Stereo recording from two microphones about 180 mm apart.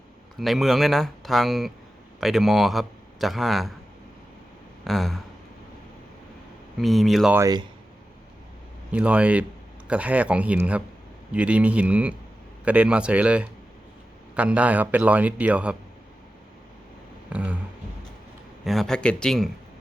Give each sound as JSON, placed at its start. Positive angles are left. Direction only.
{"t": 0.3, "sound": "speech", "side_deg": 0}
{"t": 4.9, "sound": "speech", "side_deg": 0}
{"t": 6.7, "sound": "speech", "side_deg": 0}
{"t": 7.3, "sound": "speech", "side_deg": -20}
{"t": 8.9, "sound": "a man's voice", "side_deg": -5}
{"t": 17.2, "sound": "a sound", "side_deg": -5}
{"t": 18.6, "sound": "speech", "side_deg": 0}